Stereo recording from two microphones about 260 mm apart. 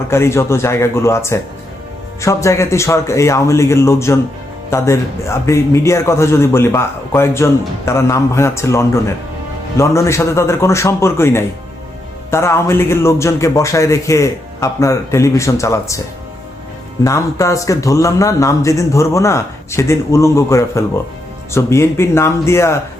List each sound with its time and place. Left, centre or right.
0.1 s a man's voice: centre
17.0 s a man's voice: centre